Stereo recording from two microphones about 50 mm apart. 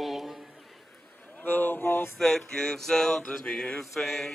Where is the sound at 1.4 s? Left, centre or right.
Left.